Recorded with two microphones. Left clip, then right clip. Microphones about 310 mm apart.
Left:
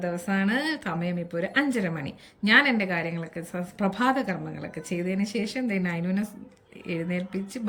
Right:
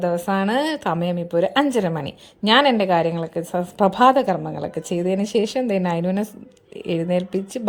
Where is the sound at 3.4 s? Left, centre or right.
Right.